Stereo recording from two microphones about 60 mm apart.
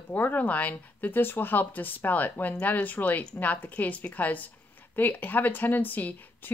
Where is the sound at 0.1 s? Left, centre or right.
Left.